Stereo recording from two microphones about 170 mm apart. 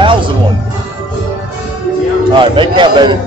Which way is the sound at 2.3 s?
30° right (ahead or behind).